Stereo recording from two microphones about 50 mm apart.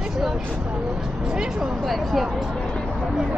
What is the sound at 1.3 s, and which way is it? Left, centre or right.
Speech, centre.